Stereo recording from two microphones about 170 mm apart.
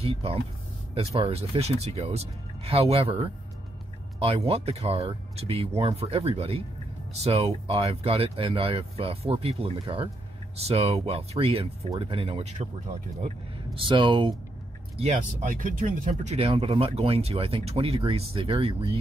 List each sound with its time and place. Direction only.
0.0 s speech: 35° right (ahead or behind)
13.7 s speech: 30° right (ahead or behind)
15.0 s speech: 45° right (ahead or behind)